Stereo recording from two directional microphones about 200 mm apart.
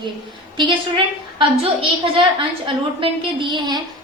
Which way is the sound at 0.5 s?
25° right (ahead or behind).